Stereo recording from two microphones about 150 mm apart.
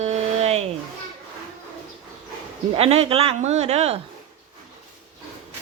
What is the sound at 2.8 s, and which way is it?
Speech, 40° right (ahead or behind).